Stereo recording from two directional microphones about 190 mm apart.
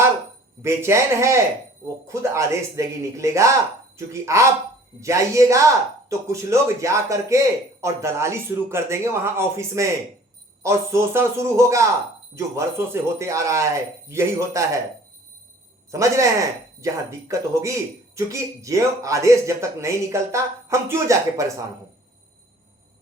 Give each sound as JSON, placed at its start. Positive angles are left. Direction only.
{"t": 0.6, "sound": "speech", "side_deg": -15}
{"t": 15.9, "sound": "speech", "side_deg": -15}